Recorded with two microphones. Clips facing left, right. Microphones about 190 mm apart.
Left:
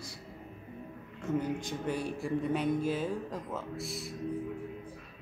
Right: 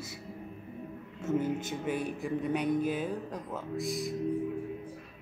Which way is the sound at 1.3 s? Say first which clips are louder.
Right 2 dB; 25° right (ahead or behind).